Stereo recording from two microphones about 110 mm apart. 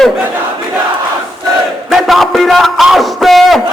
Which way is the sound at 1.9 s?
Centre (ahead or behind).